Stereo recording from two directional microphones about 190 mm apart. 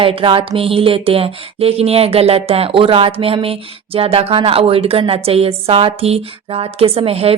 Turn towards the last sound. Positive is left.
turn(degrees=-30)  # may be behind; listen again after turning